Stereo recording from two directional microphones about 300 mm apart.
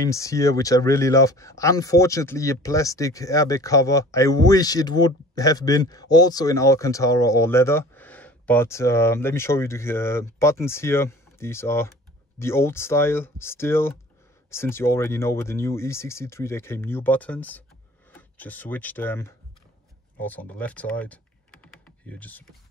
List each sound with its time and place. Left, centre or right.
0.0 s speech: centre